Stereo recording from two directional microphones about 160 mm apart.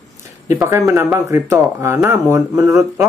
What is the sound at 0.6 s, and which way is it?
Speech, 15° right (ahead or behind).